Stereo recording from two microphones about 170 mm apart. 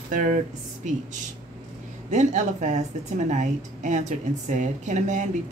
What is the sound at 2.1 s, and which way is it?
Speech, 45° right (ahead or behind).